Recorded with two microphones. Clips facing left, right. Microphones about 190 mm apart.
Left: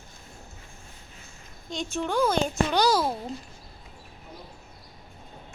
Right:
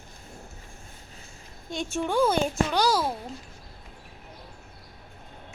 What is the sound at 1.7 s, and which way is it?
Speech, 50° right (ahead or behind).